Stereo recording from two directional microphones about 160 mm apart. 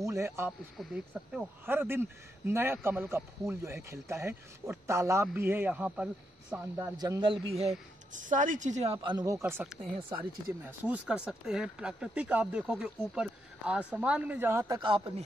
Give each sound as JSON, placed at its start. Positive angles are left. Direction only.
{"t": 0.0, "sound": "speech", "side_deg": -20}
{"t": 7.0, "sound": "speech", "side_deg": -25}
{"t": 9.0, "sound": "speech", "side_deg": -25}
{"t": 14.8, "sound": "speech", "side_deg": -30}